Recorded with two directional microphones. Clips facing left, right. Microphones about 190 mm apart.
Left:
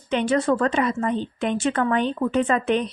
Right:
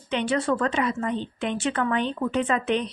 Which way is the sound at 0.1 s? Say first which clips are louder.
Left 4 dB; 45° left (ahead or behind).